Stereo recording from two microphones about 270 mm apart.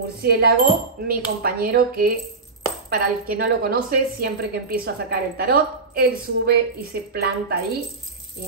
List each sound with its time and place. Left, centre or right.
0.2 s a woman's voice: right